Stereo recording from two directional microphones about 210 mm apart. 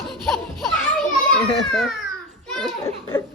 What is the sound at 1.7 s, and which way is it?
Speech, centre (ahead or behind).